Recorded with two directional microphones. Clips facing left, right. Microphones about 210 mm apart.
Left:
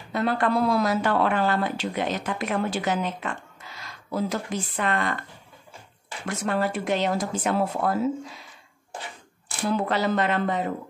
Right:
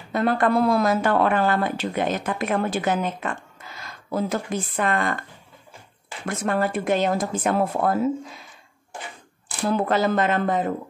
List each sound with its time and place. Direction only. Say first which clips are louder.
0.1 s speech: right 3 dB; 50° right (ahead or behind)
6.2 s speech: right 2 dB; 50° right (ahead or behind)
9.7 s speech: right 3 dB; 50° right (ahead or behind)